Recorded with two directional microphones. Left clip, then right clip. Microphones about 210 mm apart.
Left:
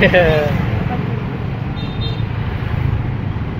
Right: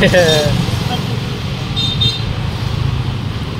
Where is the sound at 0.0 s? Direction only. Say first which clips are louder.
Right 1 dB; 15° right (ahead or behind).